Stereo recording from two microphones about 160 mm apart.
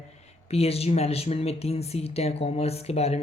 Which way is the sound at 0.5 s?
40° left (ahead or behind).